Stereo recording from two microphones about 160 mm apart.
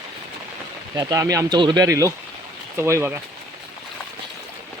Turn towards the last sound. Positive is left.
turn(degrees=-15)  # may be behind; listen again after turning